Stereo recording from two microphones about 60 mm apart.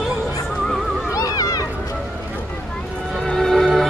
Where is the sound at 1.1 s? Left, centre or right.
Left.